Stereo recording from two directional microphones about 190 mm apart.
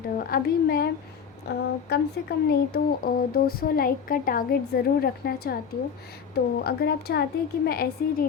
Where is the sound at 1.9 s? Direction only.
55° left (ahead or behind).